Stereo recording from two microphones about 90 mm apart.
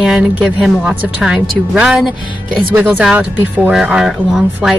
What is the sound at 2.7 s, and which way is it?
Speech, 20° right (ahead or behind).